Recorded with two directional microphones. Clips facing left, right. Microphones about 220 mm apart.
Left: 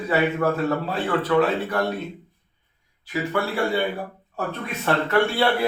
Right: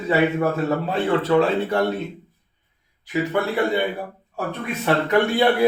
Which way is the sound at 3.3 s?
20° right (ahead or behind).